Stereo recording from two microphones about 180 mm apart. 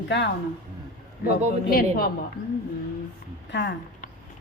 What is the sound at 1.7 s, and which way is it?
Speech, 55° left (ahead or behind).